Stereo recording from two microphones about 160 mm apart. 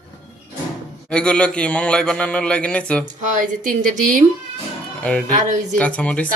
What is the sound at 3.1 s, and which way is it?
Speech, 55° right (ahead or behind).